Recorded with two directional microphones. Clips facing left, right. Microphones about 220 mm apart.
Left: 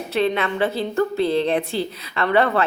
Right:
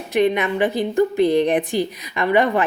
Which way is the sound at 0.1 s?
15° right (ahead or behind).